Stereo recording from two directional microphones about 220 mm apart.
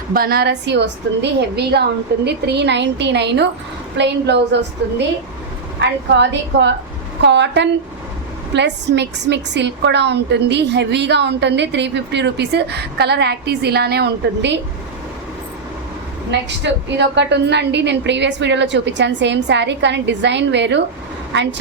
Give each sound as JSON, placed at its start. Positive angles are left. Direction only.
{"t": 0.1, "sound": "a woman's voice", "side_deg": -45}
{"t": 16.3, "sound": "a woman's voice", "side_deg": -50}